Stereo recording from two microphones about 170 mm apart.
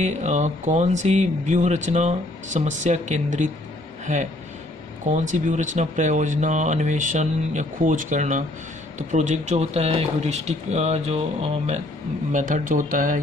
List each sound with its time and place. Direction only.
0.0 s speech: 45° right (ahead or behind)
12.3 s speech: 50° right (ahead or behind)